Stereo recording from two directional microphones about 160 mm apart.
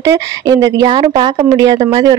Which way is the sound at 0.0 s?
20° right (ahead or behind).